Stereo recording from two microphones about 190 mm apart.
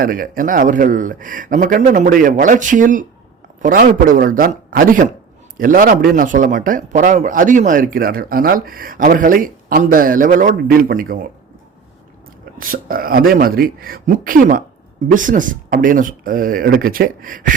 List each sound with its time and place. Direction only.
0.0 s a man's voice: 50° right (ahead or behind)
12.5 s a man's voice: 50° right (ahead or behind)